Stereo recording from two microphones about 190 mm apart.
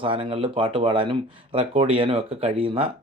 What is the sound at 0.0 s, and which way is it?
Speech, 30° right (ahead or behind).